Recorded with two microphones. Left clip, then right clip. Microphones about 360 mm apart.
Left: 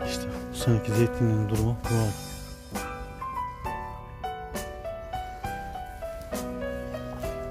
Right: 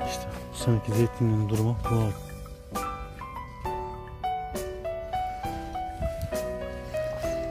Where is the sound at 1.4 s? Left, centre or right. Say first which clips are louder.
Right 1 dB; centre.